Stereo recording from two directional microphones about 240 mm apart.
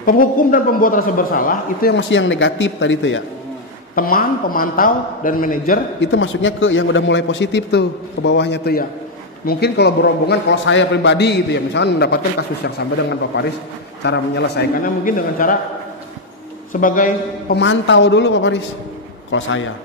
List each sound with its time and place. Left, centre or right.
0.0 s a man's voice: left
3.9 s a man's voice: left
6.1 s a man's voice: left
16.8 s a man's voice: left